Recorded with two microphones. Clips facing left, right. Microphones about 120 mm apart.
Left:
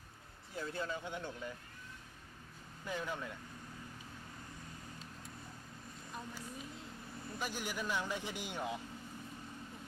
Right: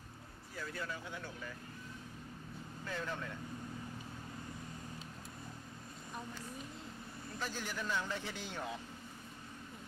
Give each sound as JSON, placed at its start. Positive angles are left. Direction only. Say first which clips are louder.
{"t": 0.5, "sound": "speech", "louder": "left 3 dB", "side_deg": 25}
{"t": 2.8, "sound": "speech", "louder": "left 1 dB", "side_deg": 15}
{"t": 7.3, "sound": "speech", "louder": "left 1 dB", "side_deg": 15}